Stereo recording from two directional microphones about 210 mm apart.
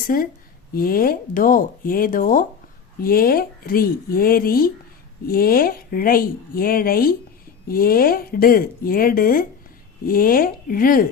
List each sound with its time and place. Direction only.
0.1 s speech: 45° left (ahead or behind)